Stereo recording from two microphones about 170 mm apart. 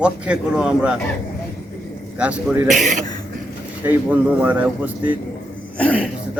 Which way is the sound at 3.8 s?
10° right (ahead or behind).